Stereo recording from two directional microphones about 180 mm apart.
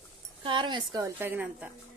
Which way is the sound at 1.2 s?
10° right (ahead or behind).